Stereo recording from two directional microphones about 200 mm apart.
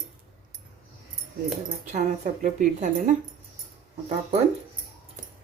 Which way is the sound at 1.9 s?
40° right (ahead or behind).